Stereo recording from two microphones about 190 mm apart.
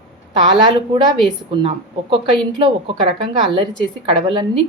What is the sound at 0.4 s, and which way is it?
A woman's voice, 25° right (ahead or behind).